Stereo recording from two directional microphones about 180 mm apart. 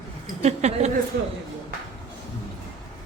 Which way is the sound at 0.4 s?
40° right (ahead or behind).